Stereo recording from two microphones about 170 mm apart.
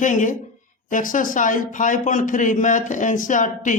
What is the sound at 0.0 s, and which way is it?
Speech, 50° left (ahead or behind).